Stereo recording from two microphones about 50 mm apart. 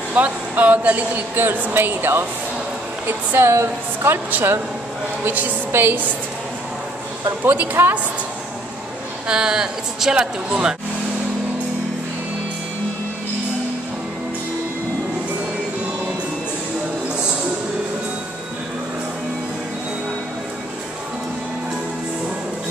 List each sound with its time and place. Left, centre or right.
0.1 s speech: right
3.3 s speech: right
4.3 s speech: right
5.7 s a woman's voice: right
7.4 s speech: right
9.3 s speech: centre